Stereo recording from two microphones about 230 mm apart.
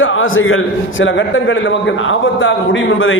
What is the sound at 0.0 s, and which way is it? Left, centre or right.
Speech, left.